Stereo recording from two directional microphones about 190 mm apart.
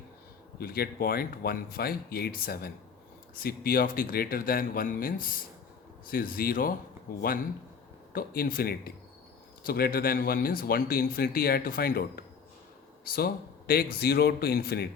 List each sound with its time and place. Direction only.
0.6 s speech: 50° left (ahead or behind)
8.1 s speech: 50° left (ahead or behind)